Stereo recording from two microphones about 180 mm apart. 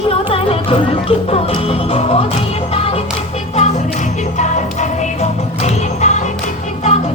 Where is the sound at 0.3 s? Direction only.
30° left (ahead or behind).